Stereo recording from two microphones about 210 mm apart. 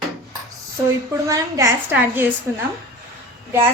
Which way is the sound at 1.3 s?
15° right (ahead or behind).